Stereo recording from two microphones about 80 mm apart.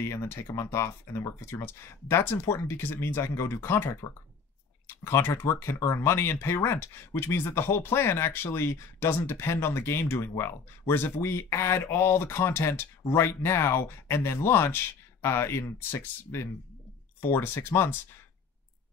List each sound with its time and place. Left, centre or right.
0.0 s speech: left